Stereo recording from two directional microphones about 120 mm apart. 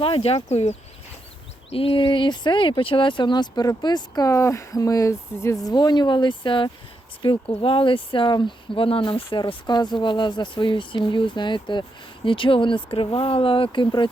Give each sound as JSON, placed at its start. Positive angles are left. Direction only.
{"t": 0.0, "sound": "speech", "side_deg": 50}
{"t": 0.4, "sound": "speech", "side_deg": 70}
{"t": 1.7, "sound": "speech", "side_deg": 50}